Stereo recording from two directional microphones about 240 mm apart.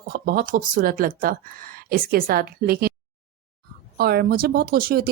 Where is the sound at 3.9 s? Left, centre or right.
Right.